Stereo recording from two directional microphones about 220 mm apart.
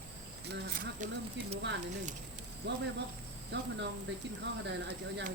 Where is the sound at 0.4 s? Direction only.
40° right (ahead or behind).